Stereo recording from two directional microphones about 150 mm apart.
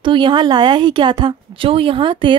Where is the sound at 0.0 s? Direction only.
30° right (ahead or behind).